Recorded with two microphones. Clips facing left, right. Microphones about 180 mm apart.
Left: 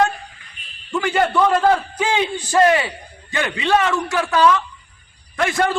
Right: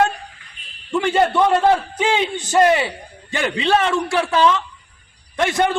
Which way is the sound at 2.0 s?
20° right (ahead or behind).